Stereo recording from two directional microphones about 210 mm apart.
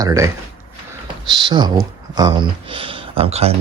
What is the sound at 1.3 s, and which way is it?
Speech, 20° right (ahead or behind).